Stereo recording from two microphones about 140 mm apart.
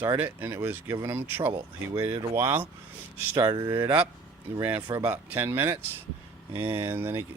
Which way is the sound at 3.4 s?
35° right (ahead or behind).